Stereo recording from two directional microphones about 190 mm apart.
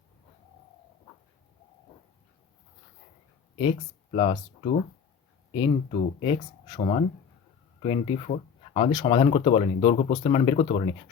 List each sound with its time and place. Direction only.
3.6 s speech: 30° left (ahead or behind)